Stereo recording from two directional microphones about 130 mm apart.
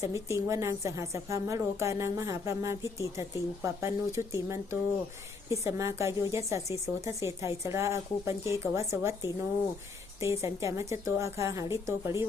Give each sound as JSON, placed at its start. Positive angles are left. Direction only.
{"t": 0.0, "sound": "a woman's voice", "side_deg": -20}